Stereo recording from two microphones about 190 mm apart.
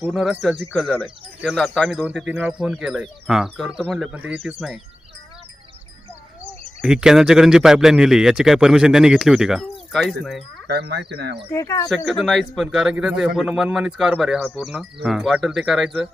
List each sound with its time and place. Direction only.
0.0 s a man's voice: 5° right (ahead or behind)
6.8 s a man's voice: 5° right (ahead or behind)
10.7 s speech: 55° right (ahead or behind)
11.4 s speech: 15° left (ahead or behind)
11.9 s a man's voice: centre (ahead or behind)